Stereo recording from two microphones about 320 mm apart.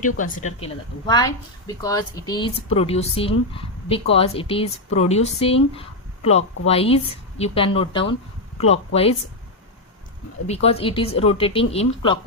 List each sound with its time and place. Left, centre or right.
0.2 s a woman's voice: left
5.7 s a sound: centre
6.7 s a woman's voice: centre
10.4 s speech: centre